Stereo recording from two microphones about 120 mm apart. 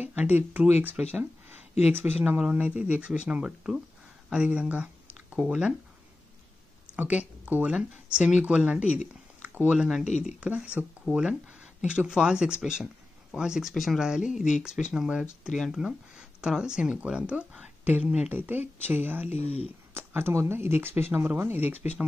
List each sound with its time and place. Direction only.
0.0 s speech: 15° right (ahead or behind)
7.0 s speech: 15° right (ahead or behind)
19.2 s speech: 60° left (ahead or behind)
19.9 s speech: 20° right (ahead or behind)
21.6 s speech: 65° left (ahead or behind)